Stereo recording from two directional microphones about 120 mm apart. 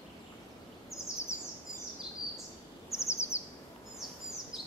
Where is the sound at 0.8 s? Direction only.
25° left (ahead or behind).